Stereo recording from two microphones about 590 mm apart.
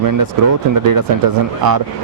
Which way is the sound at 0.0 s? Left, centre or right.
Right.